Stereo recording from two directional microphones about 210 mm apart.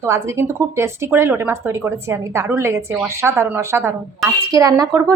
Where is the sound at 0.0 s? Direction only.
15° right (ahead or behind).